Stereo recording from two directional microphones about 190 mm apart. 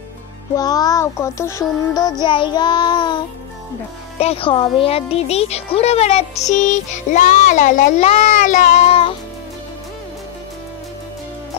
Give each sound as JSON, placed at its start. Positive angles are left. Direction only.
{"t": 0.6, "sound": "child singing", "side_deg": 20}
{"t": 4.2, "sound": "speech", "side_deg": 30}